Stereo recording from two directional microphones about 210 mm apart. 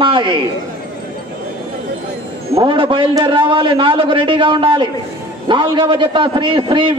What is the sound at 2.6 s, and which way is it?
A man's voice, 25° right (ahead or behind).